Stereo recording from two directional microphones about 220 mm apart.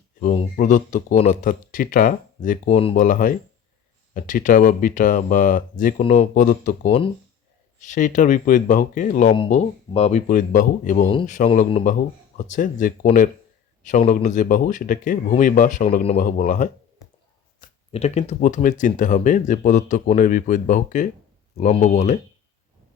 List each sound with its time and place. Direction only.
0.2 s speech: 35° left (ahead or behind)
2.9 s speech: 40° left (ahead or behind)
6.8 s speech: 25° left (ahead or behind)
7.9 s speech: 35° left (ahead or behind)